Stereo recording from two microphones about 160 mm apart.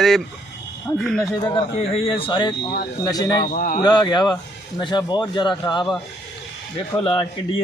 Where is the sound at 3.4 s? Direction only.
55° left (ahead or behind).